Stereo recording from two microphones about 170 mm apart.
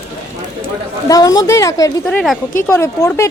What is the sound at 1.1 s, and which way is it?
Speech, 20° left (ahead or behind).